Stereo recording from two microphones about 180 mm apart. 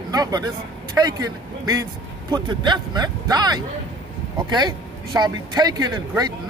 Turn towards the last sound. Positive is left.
turn(degrees=-20)  # may be behind; listen again after turning